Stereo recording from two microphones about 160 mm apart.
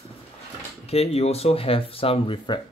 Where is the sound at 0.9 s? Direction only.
40° left (ahead or behind).